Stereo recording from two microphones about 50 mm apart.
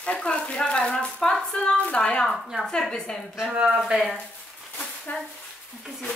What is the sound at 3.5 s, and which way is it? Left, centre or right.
Speech, centre.